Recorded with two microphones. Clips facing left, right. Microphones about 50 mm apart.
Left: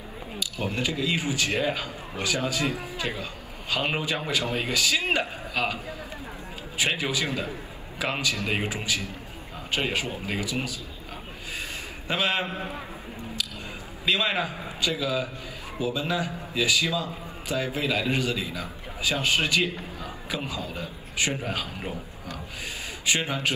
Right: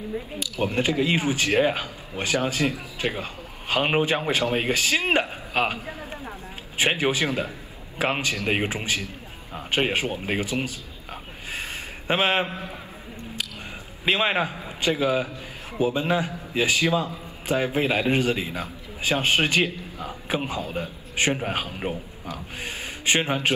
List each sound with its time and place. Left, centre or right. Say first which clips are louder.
0.6 s a man's voice: right 6 dB; right
12.1 s a man's voice: right 4 dB; right
14.0 s a man's voice: right 3 dB; right
23.0 s a man's voice: right 4 dB; right